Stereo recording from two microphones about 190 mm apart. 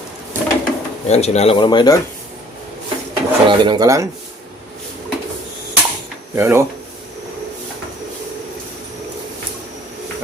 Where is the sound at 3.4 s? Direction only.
25° right (ahead or behind).